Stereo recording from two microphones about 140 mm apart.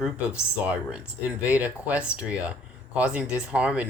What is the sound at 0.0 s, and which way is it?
Speech, 10° right (ahead or behind).